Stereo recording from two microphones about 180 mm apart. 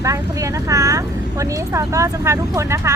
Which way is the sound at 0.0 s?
15° right (ahead or behind).